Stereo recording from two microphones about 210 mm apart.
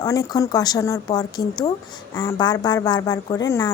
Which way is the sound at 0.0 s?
15° left (ahead or behind).